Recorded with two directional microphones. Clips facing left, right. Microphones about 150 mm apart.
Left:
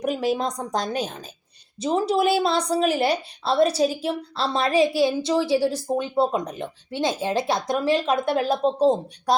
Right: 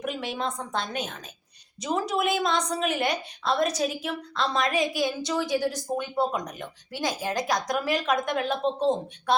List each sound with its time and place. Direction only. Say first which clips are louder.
0.0 s a woman's voice: left 7 dB; 40° left (ahead or behind)